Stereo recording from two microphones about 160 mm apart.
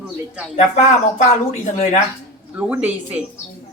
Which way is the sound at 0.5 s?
45° left (ahead or behind).